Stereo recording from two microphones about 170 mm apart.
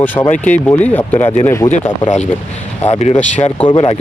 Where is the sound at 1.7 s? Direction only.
45° left (ahead or behind).